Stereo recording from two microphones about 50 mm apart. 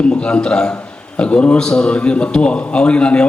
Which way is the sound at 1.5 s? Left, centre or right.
Centre.